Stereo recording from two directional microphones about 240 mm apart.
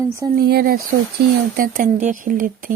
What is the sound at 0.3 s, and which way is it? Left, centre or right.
Speech, right.